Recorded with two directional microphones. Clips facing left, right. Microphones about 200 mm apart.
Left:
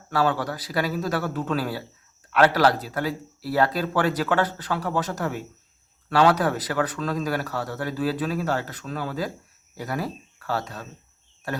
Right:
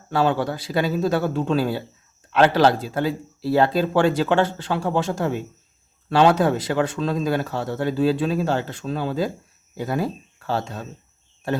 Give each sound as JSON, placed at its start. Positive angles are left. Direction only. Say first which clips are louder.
{"t": 0.1, "sound": "speech", "louder": "right 3 dB", "side_deg": -25}